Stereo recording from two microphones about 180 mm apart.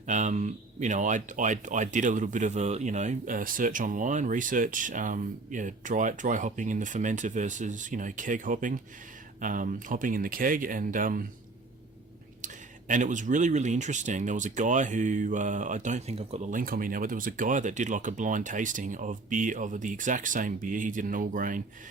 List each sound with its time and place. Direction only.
0.0 s speech: 40° right (ahead or behind)
12.9 s speech: 45° right (ahead or behind)